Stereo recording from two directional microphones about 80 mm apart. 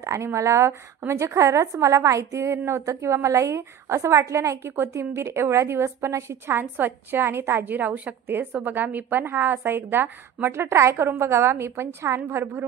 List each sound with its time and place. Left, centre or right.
0.0 s a woman's voice: right